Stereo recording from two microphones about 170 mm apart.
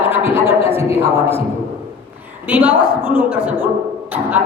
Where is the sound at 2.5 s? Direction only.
10° right (ahead or behind).